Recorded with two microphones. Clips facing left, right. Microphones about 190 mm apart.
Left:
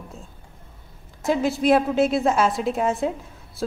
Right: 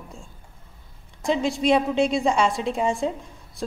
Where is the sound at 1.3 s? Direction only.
5° left (ahead or behind).